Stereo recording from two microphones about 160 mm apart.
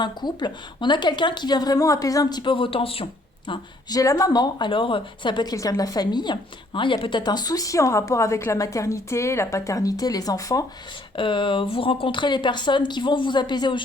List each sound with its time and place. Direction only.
0.0 s a woman's voice: 25° left (ahead or behind)